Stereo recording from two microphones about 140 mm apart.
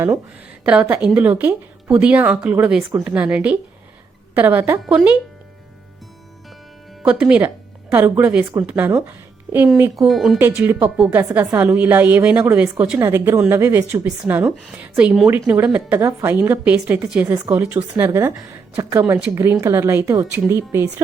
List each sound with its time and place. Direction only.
0.6 s a woman's voice: 5° right (ahead or behind)
7.0 s speech: 10° right (ahead or behind)
9.9 s speech: centre (ahead or behind)
10.3 s a woman's voice: 10° right (ahead or behind)